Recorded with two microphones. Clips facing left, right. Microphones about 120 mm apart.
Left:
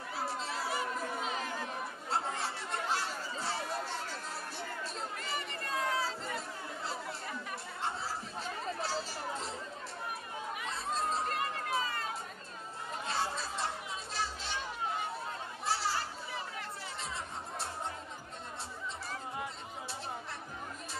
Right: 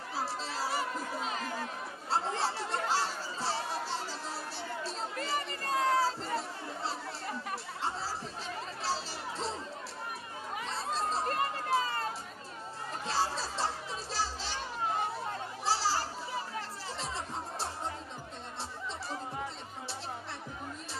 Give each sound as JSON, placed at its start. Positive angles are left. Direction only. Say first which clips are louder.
{"t": 0.1, "sound": "crowd", "louder": "right 1 dB", "side_deg": -30}
{"t": 2.0, "sound": "chatter", "louder": "right 4 dB", "side_deg": -30}
{"t": 8.8, "sound": "music", "louder": "right 1 dB", "side_deg": -30}
{"t": 10.6, "sound": "chatter", "louder": "right 2 dB", "side_deg": -30}
{"t": 13.0, "sound": "chatter", "louder": "right 3 dB", "side_deg": -30}
{"t": 15.6, "sound": "music", "louder": "right 3 dB", "side_deg": -30}